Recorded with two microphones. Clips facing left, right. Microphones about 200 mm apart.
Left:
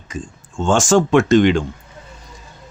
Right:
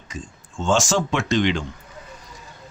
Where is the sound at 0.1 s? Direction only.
50° left (ahead or behind).